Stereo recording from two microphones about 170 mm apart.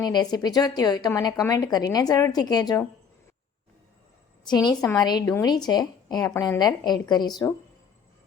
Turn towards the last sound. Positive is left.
turn(degrees=25)  # may be behind; listen again after turning